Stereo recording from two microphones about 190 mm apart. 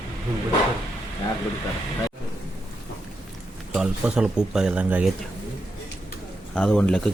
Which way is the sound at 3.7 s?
5° right (ahead or behind).